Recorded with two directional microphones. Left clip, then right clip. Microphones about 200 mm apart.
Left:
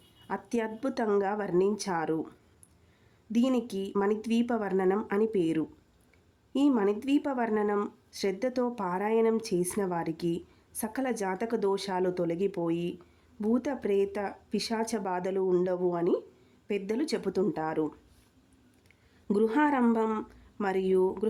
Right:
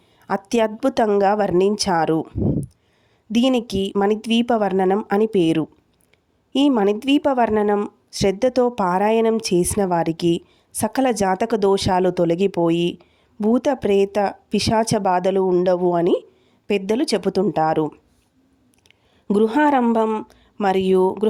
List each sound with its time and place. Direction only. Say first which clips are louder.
0.3 s speech: right 13 dB; 45° right (ahead or behind)
3.3 s speech: right 10 dB; 40° right (ahead or behind)
19.3 s speech: right 10 dB; 40° right (ahead or behind)